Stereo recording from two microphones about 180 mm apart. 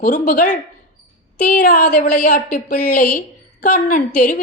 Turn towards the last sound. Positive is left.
turn(degrees=50)  # may be behind; listen again after turning